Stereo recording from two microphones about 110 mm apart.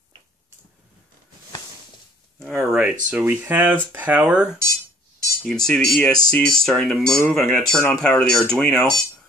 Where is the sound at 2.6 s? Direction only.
5° right (ahead or behind).